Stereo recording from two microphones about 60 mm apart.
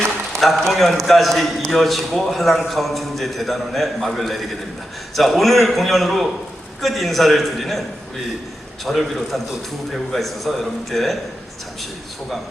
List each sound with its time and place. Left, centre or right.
0.3 s a man's voice: centre